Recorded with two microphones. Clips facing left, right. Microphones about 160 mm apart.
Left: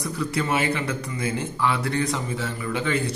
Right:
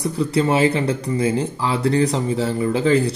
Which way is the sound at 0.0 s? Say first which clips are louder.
Right 7 dB; 30° right (ahead or behind).